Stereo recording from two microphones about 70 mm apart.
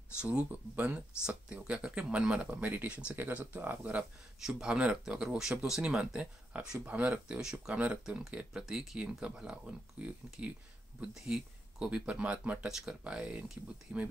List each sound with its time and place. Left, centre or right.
0.2 s speech: centre
4.5 s speech: centre
12.6 s speech: centre